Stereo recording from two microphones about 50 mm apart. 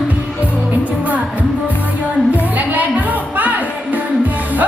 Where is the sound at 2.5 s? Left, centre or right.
Right.